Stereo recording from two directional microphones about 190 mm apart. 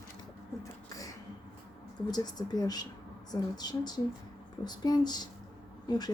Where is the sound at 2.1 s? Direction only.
20° left (ahead or behind).